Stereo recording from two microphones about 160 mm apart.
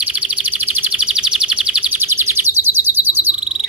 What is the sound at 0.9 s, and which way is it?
Chirp, 5° right (ahead or behind).